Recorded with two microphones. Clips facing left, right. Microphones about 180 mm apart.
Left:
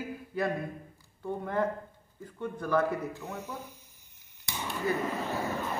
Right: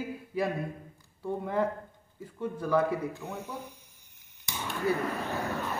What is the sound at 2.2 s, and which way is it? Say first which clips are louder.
Speech: right 2 dB; 5° right (ahead or behind).